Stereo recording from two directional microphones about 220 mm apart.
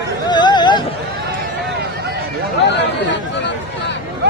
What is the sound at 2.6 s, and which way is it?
Chatter, 50° left (ahead or behind).